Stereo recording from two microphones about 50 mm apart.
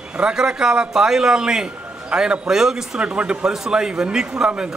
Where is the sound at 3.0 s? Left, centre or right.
Right.